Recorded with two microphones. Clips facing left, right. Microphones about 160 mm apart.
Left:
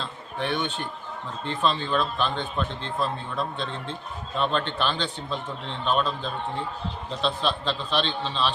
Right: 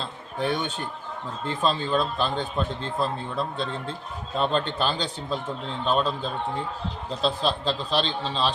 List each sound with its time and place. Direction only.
0.0 s a man's voice: 35° right (ahead or behind)
7.2 s a man's voice: 40° right (ahead or behind)